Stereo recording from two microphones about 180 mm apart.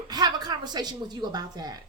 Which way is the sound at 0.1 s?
20° right (ahead or behind).